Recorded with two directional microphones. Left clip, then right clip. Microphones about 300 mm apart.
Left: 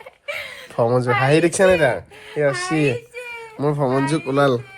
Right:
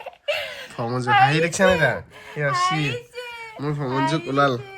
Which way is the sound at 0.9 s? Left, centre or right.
Centre.